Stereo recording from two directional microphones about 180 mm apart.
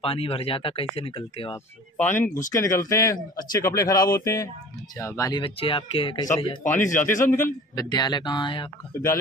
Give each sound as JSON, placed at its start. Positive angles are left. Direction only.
{"t": 0.0, "sound": "speech", "side_deg": 30}
{"t": 2.0, "sound": "a man's voice", "side_deg": 10}
{"t": 6.6, "sound": "speech", "side_deg": 45}
{"t": 7.2, "sound": "a man's voice", "side_deg": 15}